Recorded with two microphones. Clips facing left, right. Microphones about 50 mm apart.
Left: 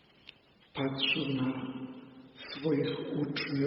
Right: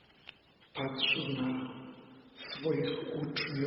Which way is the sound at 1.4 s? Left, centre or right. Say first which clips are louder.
Left 1 dB; left.